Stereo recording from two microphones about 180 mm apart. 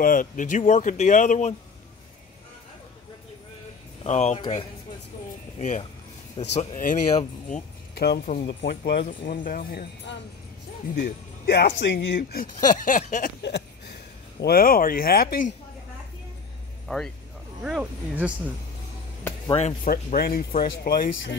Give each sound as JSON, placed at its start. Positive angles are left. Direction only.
{"t": 0.0, "sound": "speech", "side_deg": 50}
{"t": 4.0, "sound": "speech", "side_deg": 40}
{"t": 5.6, "sound": "speech", "side_deg": 40}
{"t": 7.9, "sound": "music", "side_deg": 65}
{"t": 8.5, "sound": "speech", "side_deg": 70}
{"t": 9.4, "sound": "speech", "side_deg": 55}
{"t": 10.1, "sound": "speech", "side_deg": 80}
{"t": 11.0, "sound": "speech", "side_deg": 60}
{"t": 12.2, "sound": "speech", "side_deg": 55}
{"t": 13.4, "sound": "a sound", "side_deg": 70}
{"t": 14.4, "sound": "speech", "side_deg": 55}
{"t": 16.8, "sound": "speech", "side_deg": 0}
{"t": 19.5, "sound": "speech", "side_deg": 40}
{"t": 19.9, "sound": "speech", "side_deg": 55}